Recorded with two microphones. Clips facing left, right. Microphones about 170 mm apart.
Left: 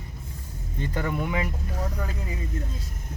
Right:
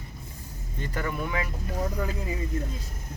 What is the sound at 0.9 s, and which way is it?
Speech, 20° left (ahead or behind).